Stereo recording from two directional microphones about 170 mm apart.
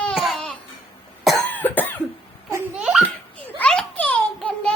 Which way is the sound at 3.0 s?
10° left (ahead or behind).